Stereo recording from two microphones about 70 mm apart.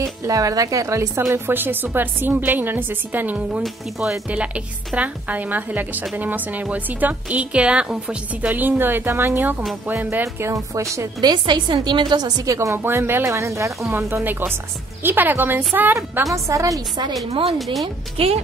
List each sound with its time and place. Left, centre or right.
0.0 s speech: right
1.3 s a woman's voice: right
3.6 s a woman's voice: centre
4.3 s a woman's voice: centre
10.2 s speech: right
11.1 s a woman's voice: right
12.4 s speech: right
12.7 s speech: right
13.8 s a woman's voice: right
16.4 s speech: right
17.1 s a woman's voice: centre